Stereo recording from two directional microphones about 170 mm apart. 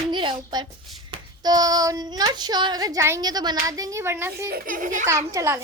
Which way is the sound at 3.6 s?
20° right (ahead or behind).